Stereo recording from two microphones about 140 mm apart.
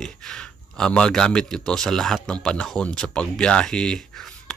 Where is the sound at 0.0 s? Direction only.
5° left (ahead or behind).